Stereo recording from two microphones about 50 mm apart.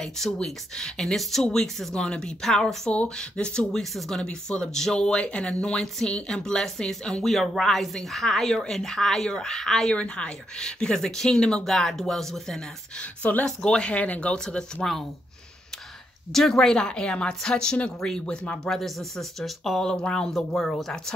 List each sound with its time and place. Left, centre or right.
0.0 s speech: centre
2.9 s speech: left
3.7 s speech: centre
9.9 s speech: left
13.0 s speech: left
13.6 s speech: centre
14.0 s speech: left
14.3 s speech: centre
16.3 s speech: centre
18.0 s speech: centre
18.3 s speech: left
18.6 s speech: centre
19.8 s speech: centre
20.2 s speech: centre